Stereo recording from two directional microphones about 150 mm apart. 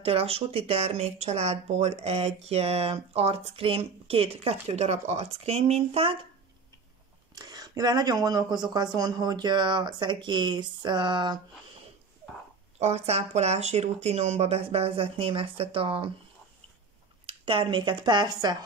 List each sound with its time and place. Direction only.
0.0 s speech: 40° right (ahead or behind)
7.3 s speech: 25° right (ahead or behind)
12.7 s speech: 45° right (ahead or behind)
17.3 s speech: 35° right (ahead or behind)